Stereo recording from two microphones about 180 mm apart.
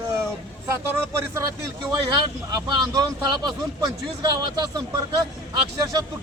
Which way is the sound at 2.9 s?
20° right (ahead or behind).